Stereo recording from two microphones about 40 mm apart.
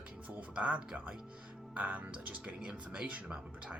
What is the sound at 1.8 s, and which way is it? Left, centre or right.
Speech, right.